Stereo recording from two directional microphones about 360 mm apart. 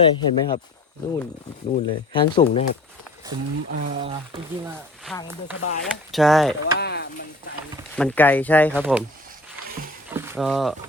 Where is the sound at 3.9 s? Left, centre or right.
Centre.